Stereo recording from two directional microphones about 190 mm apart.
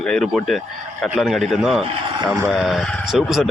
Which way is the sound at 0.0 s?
5° left (ahead or behind).